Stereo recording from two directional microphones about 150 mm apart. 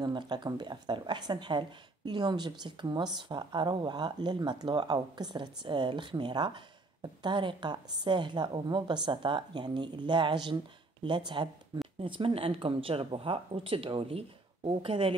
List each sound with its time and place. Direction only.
0.0 s speech: 30° right (ahead or behind)